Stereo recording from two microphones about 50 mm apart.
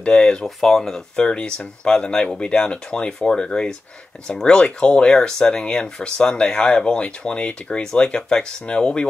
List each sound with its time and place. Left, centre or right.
0.0 s speech: centre
1.1 s speech: centre